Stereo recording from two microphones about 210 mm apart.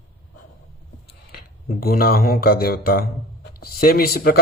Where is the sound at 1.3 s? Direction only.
45° left (ahead or behind).